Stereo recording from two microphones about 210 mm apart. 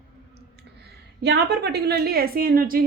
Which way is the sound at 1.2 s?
50° right (ahead or behind).